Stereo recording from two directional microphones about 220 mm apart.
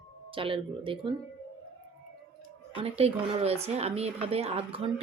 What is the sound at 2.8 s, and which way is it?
Speech, 30° right (ahead or behind).